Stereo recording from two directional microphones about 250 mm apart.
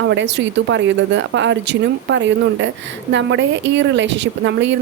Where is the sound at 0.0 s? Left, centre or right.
Right.